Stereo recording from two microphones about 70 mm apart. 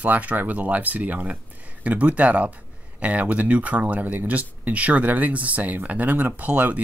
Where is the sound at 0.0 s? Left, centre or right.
Right.